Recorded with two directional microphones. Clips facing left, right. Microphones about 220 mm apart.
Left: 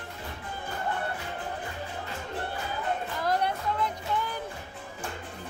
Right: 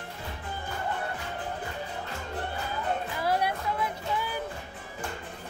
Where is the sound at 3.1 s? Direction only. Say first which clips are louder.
Even; 10° right (ahead or behind).